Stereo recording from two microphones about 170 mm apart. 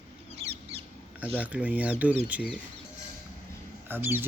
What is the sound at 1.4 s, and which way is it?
Speech, 10° right (ahead or behind).